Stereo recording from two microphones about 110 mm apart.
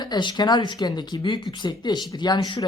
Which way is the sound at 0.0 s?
40° left (ahead or behind).